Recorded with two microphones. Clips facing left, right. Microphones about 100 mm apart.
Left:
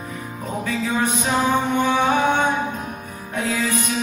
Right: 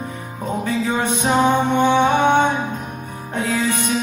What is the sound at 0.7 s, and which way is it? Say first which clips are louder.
Music: right 1 dB; 30° right (ahead or behind).